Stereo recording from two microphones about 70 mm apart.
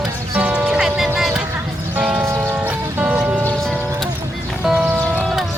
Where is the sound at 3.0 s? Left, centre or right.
Centre.